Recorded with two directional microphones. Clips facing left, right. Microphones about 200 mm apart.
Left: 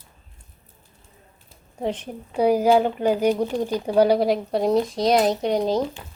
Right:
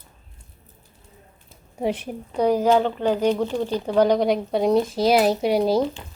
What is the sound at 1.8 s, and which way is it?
Speech, 10° right (ahead or behind).